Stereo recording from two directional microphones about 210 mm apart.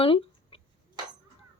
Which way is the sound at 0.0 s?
25° left (ahead or behind).